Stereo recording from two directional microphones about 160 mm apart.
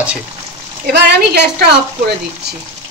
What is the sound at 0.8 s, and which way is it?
Speech, 90° right.